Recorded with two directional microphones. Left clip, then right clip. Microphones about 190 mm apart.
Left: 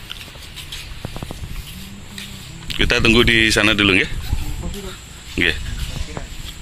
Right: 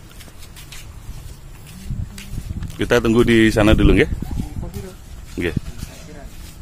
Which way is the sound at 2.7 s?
20° right (ahead or behind).